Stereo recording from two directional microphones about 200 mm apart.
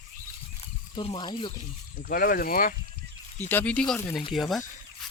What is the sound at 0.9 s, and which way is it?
Speech, 25° left (ahead or behind).